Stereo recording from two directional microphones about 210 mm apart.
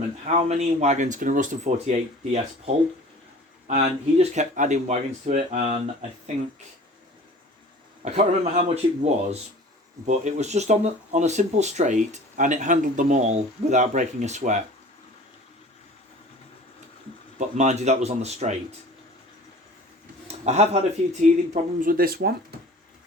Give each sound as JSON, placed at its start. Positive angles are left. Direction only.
{"t": 0.3, "sound": "speech", "side_deg": -30}
{"t": 3.7, "sound": "speech", "side_deg": -35}
{"t": 8.0, "sound": "speech", "side_deg": -30}
{"t": 17.3, "sound": "speech", "side_deg": -35}
{"t": 20.2, "sound": "a sound", "side_deg": -30}
{"t": 21.1, "sound": "speech", "side_deg": -35}